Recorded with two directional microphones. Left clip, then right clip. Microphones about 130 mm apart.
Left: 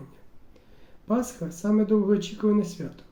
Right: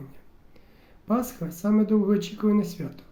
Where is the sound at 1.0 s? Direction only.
35° right (ahead or behind).